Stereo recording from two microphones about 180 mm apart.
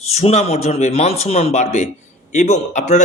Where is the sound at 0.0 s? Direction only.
35° left (ahead or behind).